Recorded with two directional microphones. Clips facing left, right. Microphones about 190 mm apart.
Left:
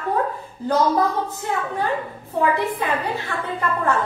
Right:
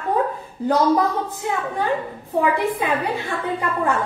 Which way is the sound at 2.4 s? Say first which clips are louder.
Right 1 dB; 15° right (ahead or behind).